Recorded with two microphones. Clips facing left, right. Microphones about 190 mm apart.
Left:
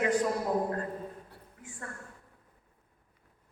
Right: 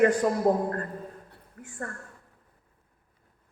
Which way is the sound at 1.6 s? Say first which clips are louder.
Right 7 dB; 55° right (ahead or behind).